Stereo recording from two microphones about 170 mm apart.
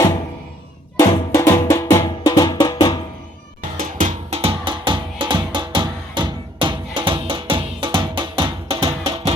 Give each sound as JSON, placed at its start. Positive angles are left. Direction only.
{"t": 0.9, "sound": "music", "side_deg": 20}
{"t": 3.8, "sound": "music", "side_deg": -50}